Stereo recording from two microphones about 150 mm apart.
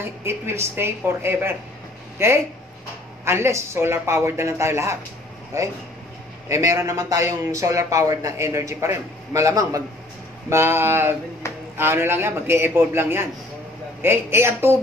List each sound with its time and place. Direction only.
0.0 s speech: 15° right (ahead or behind)